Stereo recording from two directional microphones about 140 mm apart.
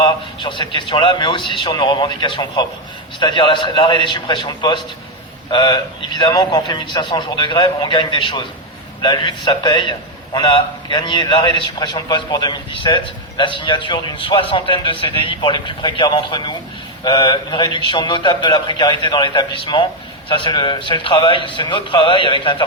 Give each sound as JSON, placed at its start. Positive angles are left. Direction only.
{"t": 0.4, "sound": "a man's voice", "side_deg": 35}